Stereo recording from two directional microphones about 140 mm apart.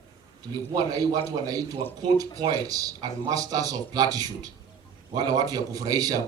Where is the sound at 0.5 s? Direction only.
25° right (ahead or behind).